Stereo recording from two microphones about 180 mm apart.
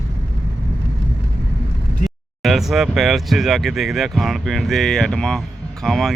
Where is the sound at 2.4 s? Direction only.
Centre (ahead or behind).